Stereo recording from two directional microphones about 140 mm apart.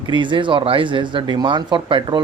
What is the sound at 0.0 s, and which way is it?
Speech, 35° right (ahead or behind).